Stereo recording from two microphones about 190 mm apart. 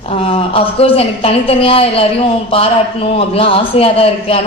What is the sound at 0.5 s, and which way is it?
A man's voice, 30° left (ahead or behind).